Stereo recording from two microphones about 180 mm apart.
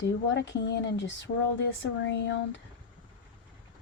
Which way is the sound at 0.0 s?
85° left.